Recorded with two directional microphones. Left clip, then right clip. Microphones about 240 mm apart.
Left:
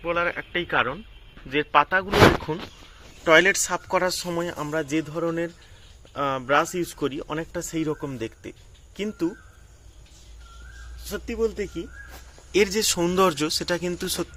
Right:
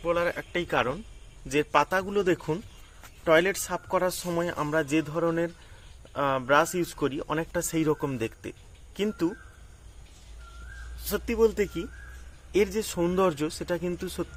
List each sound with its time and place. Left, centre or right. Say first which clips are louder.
0.0 s speech: left 2 dB; centre
11.0 s speech: right 2 dB; centre
12.5 s speech: left 4 dB; centre